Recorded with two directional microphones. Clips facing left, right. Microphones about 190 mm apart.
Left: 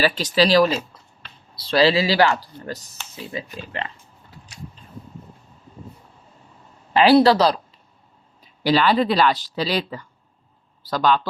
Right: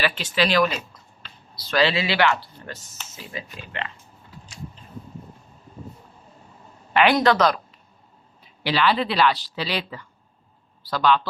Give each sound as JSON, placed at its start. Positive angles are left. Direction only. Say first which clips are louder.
{"t": 0.0, "sound": "speech", "louder": "left 5 dB", "side_deg": 40}
{"t": 6.9, "sound": "speech", "louder": "left 5 dB", "side_deg": 30}
{"t": 8.6, "sound": "speech", "louder": "left 4 dB", "side_deg": 40}